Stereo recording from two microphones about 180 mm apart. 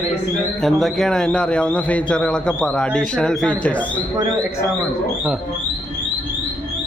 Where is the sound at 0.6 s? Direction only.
Centre (ahead or behind).